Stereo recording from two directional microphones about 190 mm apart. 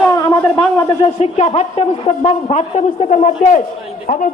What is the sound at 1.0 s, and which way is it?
A man's voice, 35° left (ahead or behind).